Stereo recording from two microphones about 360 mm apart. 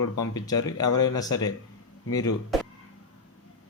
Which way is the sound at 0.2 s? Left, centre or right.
Centre.